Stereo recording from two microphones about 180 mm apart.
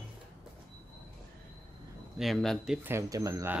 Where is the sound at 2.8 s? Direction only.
15° right (ahead or behind).